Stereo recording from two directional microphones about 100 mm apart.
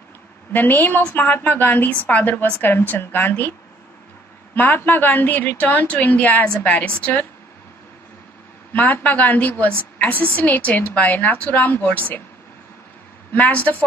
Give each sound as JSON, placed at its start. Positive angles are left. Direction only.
{"t": 0.5, "sound": "a woman's voice", "side_deg": 20}
{"t": 4.6, "sound": "a woman's voice", "side_deg": 20}
{"t": 8.7, "sound": "a woman's voice", "side_deg": 15}
{"t": 13.3, "sound": "a woman's voice", "side_deg": 15}